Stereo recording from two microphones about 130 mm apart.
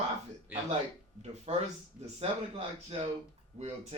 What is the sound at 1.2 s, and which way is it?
Speech, 55° right (ahead or behind).